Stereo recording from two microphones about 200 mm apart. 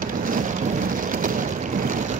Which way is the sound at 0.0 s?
40° right (ahead or behind).